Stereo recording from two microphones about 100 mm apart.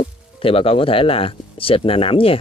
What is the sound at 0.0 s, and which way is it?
Speech, 70° left (ahead or behind).